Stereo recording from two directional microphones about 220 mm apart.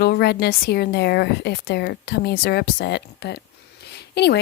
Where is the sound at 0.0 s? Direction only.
45° left (ahead or behind).